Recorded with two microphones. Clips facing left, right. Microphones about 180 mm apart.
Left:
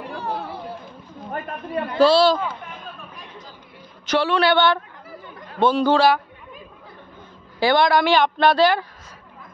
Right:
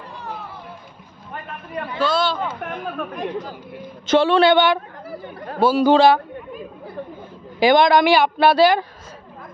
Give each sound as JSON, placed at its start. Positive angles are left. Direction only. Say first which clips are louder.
{"t": 2.0, "sound": "a man's voice", "louder": "left 6 dB", "side_deg": 35}
{"t": 2.6, "sound": "speech", "louder": "right 10 dB", "side_deg": -65}
{"t": 4.1, "sound": "speech", "louder": "right 4 dB", "side_deg": -25}
{"t": 5.6, "sound": "a man's voice", "louder": "right 2 dB", "side_deg": -5}
{"t": 5.9, "sound": "speech", "louder": "right 3 dB", "side_deg": -25}
{"t": 7.6, "sound": "a man's voice", "louder": "right 3 dB", "side_deg": -20}